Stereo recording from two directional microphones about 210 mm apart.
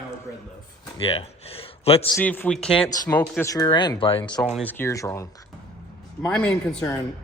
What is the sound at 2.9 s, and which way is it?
Speech, 15° left (ahead or behind).